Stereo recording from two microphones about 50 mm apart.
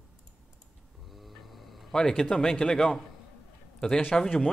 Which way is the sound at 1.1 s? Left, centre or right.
Centre.